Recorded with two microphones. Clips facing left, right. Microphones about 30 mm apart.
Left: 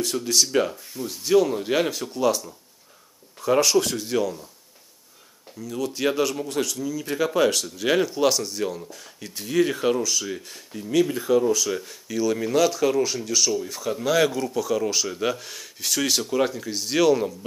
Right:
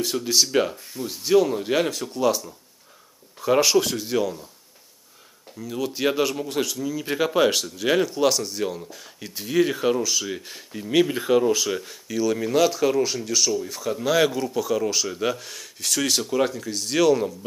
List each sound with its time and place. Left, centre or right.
0.0 s speech: centre
5.6 s speech: centre
7.7 s speech: centre
10.0 s speech: centre
10.8 s speech: right
11.7 s speech: centre
12.1 s speech: centre